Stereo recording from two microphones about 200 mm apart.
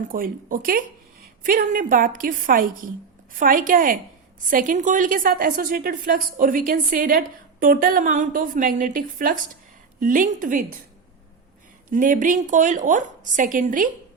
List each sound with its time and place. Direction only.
0.1 s a woman's voice: 45° right (ahead or behind)
11.9 s a woman's voice: 40° right (ahead or behind)